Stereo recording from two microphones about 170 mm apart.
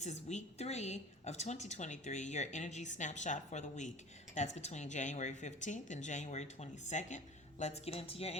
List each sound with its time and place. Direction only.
0.0 s a woman's voice: 45° left (ahead or behind)